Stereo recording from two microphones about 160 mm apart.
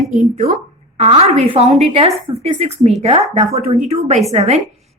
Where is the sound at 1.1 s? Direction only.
35° right (ahead or behind).